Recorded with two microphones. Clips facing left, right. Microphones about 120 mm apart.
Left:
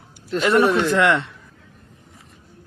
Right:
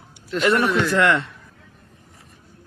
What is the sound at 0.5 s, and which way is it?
Speech, 20° left (ahead or behind).